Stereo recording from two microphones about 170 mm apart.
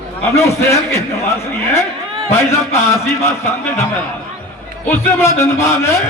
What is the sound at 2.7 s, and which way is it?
A man's voice, 15° left (ahead or behind).